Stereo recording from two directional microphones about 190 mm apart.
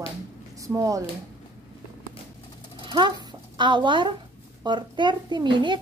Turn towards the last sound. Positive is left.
turn(degrees=-25)  # may be behind; listen again after turning